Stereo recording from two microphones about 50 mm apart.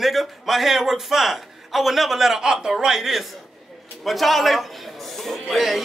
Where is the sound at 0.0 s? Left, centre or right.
Centre.